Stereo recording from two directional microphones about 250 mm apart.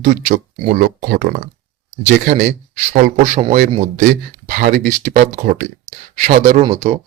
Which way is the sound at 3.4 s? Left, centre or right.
Right.